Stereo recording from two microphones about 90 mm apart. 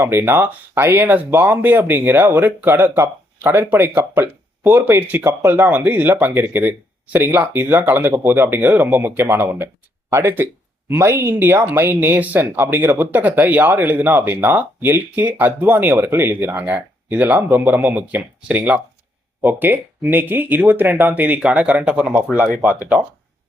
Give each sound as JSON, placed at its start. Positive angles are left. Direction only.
{"t": 0.0, "sound": "speech", "side_deg": -25}